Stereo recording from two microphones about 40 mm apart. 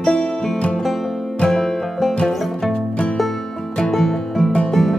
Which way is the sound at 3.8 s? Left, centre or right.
Centre.